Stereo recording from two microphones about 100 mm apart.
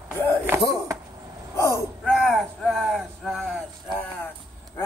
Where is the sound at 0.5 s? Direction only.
25° right (ahead or behind).